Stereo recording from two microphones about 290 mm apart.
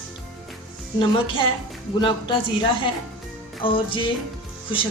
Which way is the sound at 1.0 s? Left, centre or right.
Centre.